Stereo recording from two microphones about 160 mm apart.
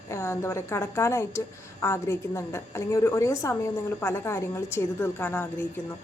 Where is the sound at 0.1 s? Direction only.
15° left (ahead or behind).